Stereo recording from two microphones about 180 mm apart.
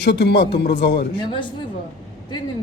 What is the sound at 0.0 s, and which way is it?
Speech, 70° left (ahead or behind).